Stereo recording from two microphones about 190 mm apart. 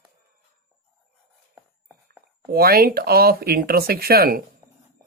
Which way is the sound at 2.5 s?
55° right (ahead or behind).